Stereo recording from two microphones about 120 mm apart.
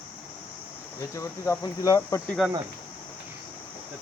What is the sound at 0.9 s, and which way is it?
Speech, 25° left (ahead or behind).